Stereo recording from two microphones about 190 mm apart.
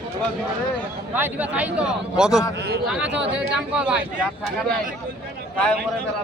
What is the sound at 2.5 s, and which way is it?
Speech, 60° right (ahead or behind).